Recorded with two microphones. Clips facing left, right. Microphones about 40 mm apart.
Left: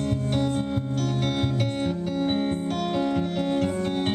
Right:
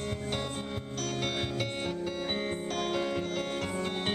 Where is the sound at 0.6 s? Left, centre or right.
Centre.